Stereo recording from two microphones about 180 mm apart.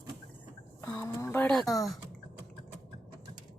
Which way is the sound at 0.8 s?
15° left (ahead or behind).